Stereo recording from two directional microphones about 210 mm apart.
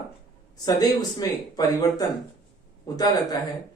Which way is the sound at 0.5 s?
15° left (ahead or behind).